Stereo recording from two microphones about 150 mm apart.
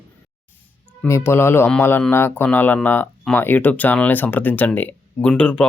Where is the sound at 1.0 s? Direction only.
15° left (ahead or behind).